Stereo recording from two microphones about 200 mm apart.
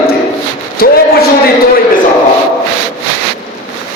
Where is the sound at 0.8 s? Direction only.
50° left (ahead or behind).